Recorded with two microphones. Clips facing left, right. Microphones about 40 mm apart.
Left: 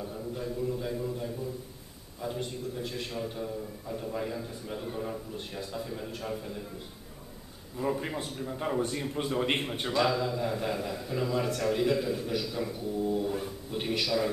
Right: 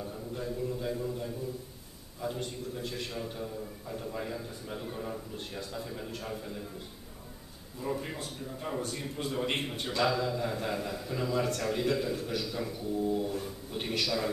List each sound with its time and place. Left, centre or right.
0.0 s a sound: centre
2.2 s a man's voice: centre
7.8 s a man's voice: centre
8.2 s a man's voice: left; by 13.3 s centre
13.3 s a sound: centre
13.7 s a man's voice: centre